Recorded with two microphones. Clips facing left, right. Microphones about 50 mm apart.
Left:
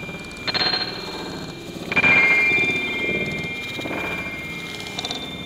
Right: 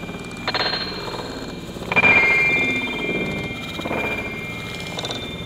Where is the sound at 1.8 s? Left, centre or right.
Centre.